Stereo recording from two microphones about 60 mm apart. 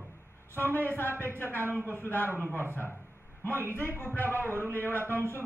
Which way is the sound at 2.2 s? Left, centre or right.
Right.